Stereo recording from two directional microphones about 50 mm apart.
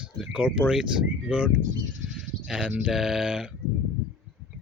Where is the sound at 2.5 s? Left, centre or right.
Centre.